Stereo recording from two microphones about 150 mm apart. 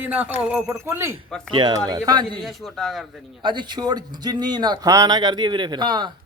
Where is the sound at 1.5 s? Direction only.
30° right (ahead or behind).